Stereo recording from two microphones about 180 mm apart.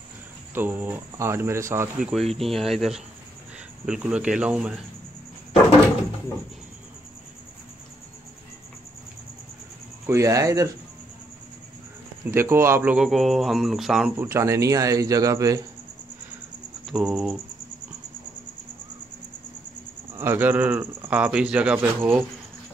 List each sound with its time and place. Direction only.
0.6 s speech: 10° right (ahead or behind)
2.0 s speech: centre (ahead or behind)
10.0 s speech: 15° right (ahead or behind)
12.3 s speech: 15° right (ahead or behind)
14.1 s speech: 15° right (ahead or behind)
16.8 s speech: 5° right (ahead or behind)
20.2 s speech: 10° right (ahead or behind)